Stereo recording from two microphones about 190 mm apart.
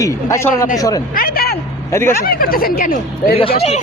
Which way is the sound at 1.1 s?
50° left (ahead or behind).